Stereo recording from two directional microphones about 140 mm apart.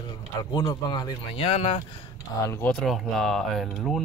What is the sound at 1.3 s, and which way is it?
Speech, 40° left (ahead or behind).